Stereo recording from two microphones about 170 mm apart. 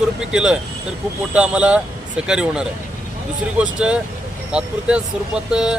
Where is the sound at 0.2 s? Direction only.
5° right (ahead or behind).